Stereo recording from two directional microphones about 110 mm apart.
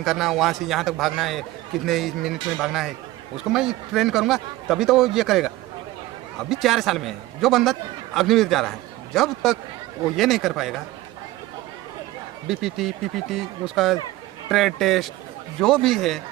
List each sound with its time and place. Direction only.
0.0 s a man's voice: centre (ahead or behind)
6.5 s a man's voice: centre (ahead or behind)
12.5 s a man's voice: 5° right (ahead or behind)